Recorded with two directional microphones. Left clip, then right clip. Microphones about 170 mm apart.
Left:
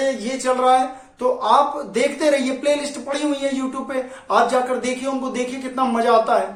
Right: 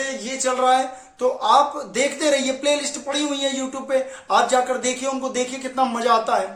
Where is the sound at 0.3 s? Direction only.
15° right (ahead or behind).